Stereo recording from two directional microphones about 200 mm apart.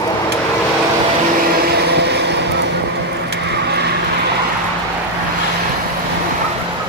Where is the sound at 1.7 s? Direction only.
55° right (ahead or behind).